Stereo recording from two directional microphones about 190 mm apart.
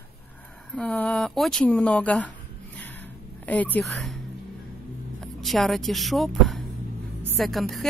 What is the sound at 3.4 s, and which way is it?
Speech, 10° left (ahead or behind).